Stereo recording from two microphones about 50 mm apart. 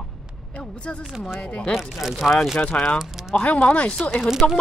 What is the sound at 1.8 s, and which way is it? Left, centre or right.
Speech, centre.